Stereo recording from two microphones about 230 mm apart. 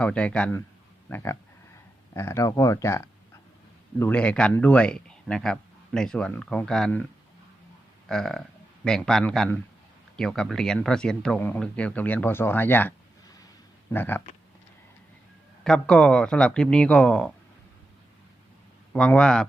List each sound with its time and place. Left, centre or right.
0.0 s speech: centre
8.0 s a sound: centre
8.8 s speech: centre
13.9 s speech: centre
15.6 s speech: centre
18.9 s speech: centre